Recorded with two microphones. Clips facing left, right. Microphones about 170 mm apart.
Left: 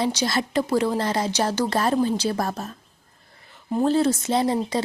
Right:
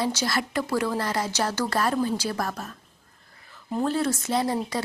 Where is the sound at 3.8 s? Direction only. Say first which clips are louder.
Left 5 dB; 25° left (ahead or behind).